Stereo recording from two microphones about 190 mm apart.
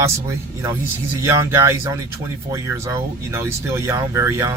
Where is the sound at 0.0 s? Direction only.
15° right (ahead or behind).